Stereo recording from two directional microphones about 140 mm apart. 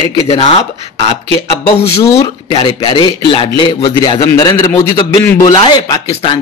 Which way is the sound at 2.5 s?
35° left (ahead or behind).